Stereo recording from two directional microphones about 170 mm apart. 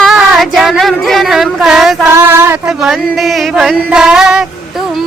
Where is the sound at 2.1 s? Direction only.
15° right (ahead or behind).